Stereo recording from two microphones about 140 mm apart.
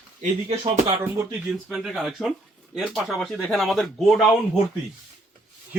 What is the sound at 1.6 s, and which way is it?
Speech, centre (ahead or behind).